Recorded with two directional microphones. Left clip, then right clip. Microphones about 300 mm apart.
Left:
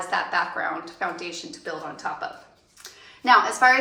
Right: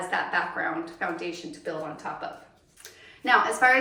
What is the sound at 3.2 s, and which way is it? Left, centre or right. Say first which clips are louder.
Speech: left 4 dB; centre.